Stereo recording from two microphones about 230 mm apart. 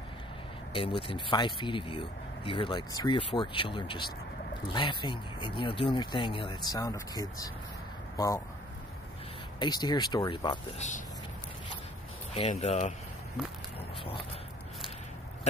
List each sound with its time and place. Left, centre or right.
0.7 s speech: left
9.6 s speech: centre
12.4 s speech: left
13.7 s a sound: left